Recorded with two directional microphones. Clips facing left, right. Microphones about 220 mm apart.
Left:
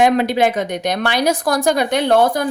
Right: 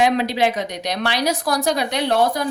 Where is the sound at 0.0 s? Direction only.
50° left (ahead or behind).